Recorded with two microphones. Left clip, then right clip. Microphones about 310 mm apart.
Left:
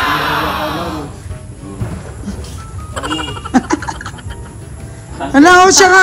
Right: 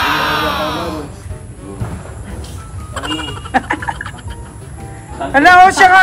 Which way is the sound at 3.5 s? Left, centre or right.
Centre.